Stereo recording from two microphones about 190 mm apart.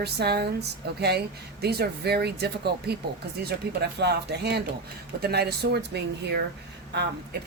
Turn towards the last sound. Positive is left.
turn(degrees=-60)  # may be behind; listen again after turning